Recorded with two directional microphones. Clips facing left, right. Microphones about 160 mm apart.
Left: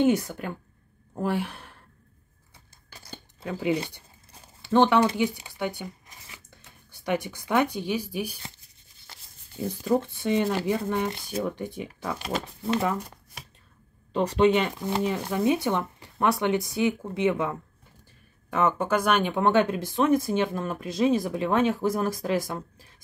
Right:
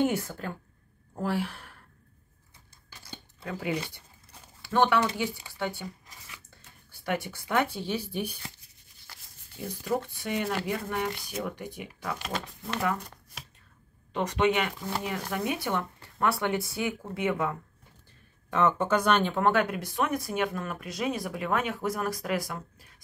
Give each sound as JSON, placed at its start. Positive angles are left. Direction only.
{"t": 0.0, "sound": "speech", "side_deg": 20}
{"t": 3.3, "sound": "speech", "side_deg": 20}
{"t": 9.0, "sound": "speech", "side_deg": 25}
{"t": 14.1, "sound": "speech", "side_deg": 30}
{"t": 18.5, "sound": "speech", "side_deg": 10}